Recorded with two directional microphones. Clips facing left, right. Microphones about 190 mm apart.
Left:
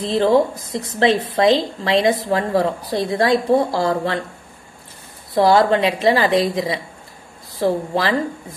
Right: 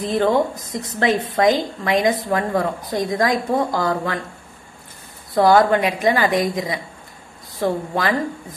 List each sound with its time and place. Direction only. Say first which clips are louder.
0.0 s a woman's voice: left 2 dB; 30° left (ahead or behind)
5.3 s a woman's voice: even; 25° left (ahead or behind)